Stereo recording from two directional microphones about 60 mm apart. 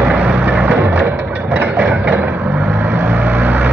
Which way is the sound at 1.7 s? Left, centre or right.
Right.